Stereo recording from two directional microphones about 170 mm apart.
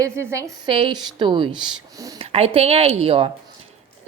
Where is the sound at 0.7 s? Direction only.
30° right (ahead or behind).